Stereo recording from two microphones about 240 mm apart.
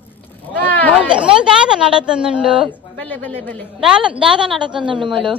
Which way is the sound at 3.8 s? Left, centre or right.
Centre.